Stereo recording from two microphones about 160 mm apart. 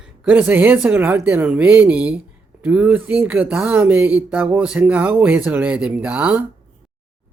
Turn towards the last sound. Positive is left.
turn(degrees=-10)  # may be behind; listen again after turning